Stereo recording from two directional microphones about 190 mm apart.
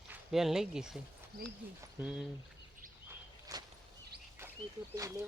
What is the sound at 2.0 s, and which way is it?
Speech, 5° right (ahead or behind).